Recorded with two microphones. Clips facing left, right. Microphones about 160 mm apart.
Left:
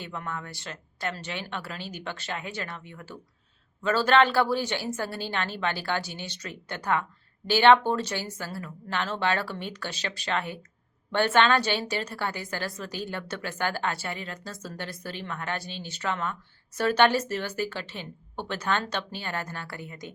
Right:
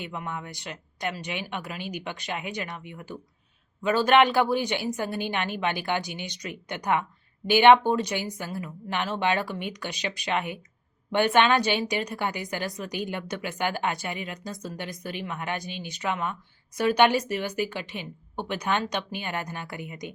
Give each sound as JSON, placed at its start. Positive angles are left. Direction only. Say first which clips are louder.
{"t": 0.0, "sound": "a woman's voice", "louder": "right 1 dB", "side_deg": -15}